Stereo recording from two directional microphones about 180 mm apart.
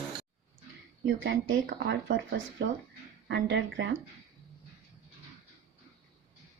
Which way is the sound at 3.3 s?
75° right (ahead or behind).